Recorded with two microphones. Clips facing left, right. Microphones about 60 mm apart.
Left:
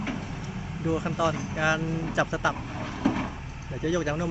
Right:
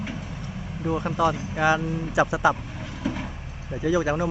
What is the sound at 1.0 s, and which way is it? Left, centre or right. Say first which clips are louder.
Speech: right 3 dB; centre.